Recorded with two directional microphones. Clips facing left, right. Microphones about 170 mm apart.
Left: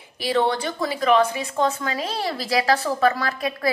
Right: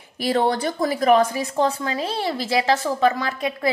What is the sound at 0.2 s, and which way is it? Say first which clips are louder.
A woman's voice: right 1 dB; 45° right (ahead or behind).